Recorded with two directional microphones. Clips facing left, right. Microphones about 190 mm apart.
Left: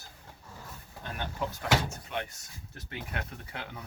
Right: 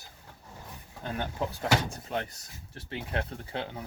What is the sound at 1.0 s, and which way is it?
Speech, 30° right (ahead or behind).